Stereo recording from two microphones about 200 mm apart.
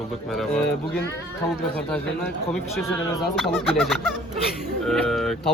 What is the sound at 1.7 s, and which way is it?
A man's voice, 10° left (ahead or behind).